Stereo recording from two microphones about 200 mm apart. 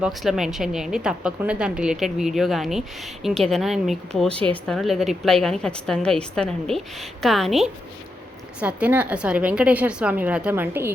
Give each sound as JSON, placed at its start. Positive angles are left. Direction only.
{"t": 0.0, "sound": "a woman's voice", "side_deg": 0}